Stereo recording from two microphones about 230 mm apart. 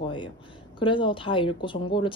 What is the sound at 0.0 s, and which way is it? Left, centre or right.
A woman's voice, left.